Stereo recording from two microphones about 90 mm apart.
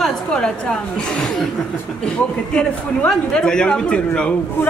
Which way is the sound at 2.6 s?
10° left (ahead or behind).